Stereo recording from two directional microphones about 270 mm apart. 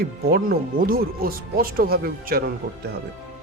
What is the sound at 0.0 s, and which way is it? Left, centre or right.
Speech, right.